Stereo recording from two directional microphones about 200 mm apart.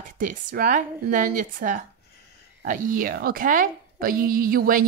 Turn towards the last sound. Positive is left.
turn(degrees=-45)  # may be behind; listen again after turning